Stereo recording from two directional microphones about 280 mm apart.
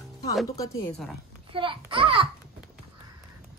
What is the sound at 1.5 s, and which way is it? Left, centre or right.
Speech, centre.